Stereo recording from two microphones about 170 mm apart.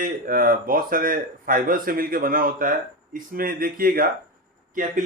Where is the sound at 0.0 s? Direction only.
55° right (ahead or behind).